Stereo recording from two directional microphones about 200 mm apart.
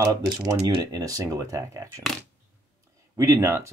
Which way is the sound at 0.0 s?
20° right (ahead or behind).